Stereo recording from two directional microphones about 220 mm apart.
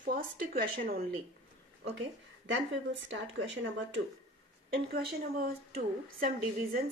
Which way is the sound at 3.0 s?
55° right (ahead or behind).